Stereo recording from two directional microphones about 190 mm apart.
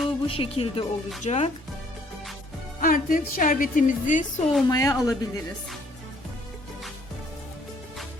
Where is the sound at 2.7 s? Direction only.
45° left (ahead or behind).